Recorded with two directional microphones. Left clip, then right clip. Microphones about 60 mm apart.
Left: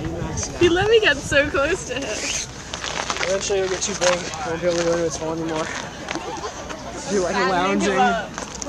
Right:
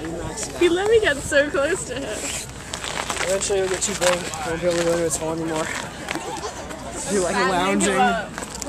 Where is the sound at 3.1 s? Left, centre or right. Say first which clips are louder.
Even; right.